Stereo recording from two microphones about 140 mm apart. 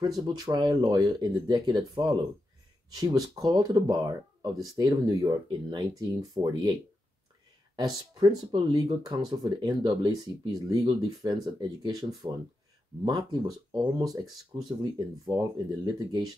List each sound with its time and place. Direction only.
0.0 s speech: 30° right (ahead or behind)
7.7 s speech: 30° right (ahead or behind)